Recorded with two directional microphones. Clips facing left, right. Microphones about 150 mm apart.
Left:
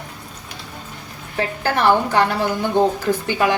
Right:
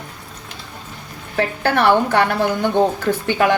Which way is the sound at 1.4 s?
60° right (ahead or behind).